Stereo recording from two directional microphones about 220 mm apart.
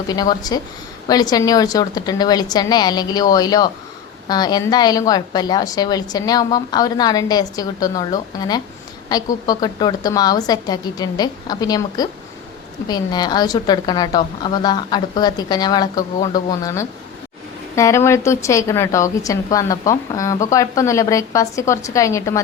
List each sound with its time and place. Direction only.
0.1 s a woman's voice: 15° left (ahead or behind)